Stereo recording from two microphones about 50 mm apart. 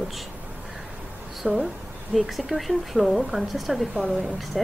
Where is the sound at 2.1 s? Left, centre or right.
Centre.